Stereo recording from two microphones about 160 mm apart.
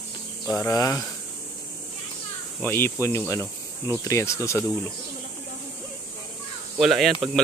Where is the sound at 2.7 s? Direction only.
15° left (ahead or behind).